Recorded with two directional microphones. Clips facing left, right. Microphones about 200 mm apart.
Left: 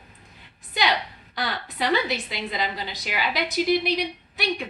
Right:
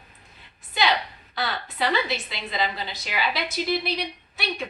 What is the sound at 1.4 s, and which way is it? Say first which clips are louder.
A woman's voice: right 1 dB; 15° left (ahead or behind).